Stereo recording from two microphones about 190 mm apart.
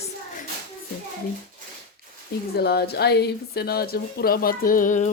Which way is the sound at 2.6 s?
55° left (ahead or behind).